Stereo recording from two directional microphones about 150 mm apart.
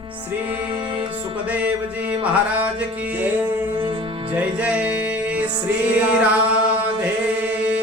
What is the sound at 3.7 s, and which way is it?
Music, 35° right (ahead or behind).